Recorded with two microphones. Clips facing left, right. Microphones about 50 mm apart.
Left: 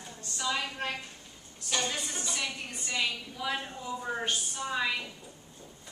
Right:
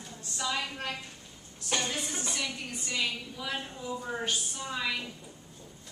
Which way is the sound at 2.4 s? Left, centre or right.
Centre.